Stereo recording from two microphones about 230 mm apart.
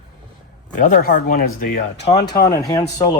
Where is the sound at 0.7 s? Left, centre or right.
Left.